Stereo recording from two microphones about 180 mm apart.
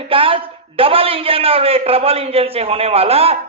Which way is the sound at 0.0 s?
30° right (ahead or behind).